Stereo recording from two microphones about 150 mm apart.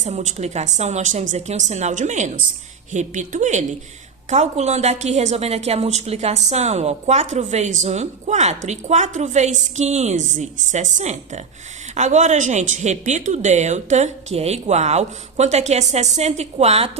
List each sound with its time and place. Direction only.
0.0 s a woman's voice: 50° right (ahead or behind)